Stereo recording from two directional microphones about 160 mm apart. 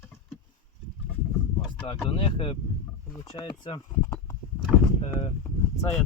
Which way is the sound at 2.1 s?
35° left (ahead or behind).